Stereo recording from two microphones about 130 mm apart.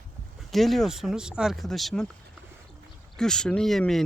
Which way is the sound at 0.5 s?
Centre (ahead or behind).